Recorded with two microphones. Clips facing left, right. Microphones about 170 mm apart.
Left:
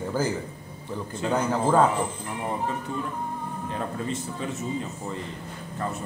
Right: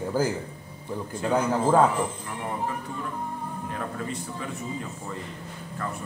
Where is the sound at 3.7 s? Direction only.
25° left (ahead or behind).